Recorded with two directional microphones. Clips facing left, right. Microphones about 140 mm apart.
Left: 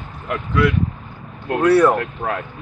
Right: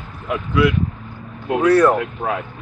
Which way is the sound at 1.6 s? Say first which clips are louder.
Even; 10° left (ahead or behind).